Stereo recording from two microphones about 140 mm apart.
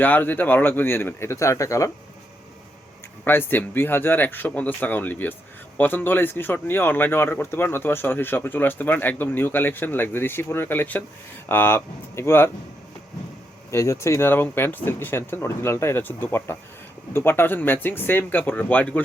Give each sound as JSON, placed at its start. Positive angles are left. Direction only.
{"t": 0.0, "sound": "speech", "side_deg": 15}
{"t": 3.2, "sound": "speech", "side_deg": 15}
{"t": 13.7, "sound": "speech", "side_deg": 20}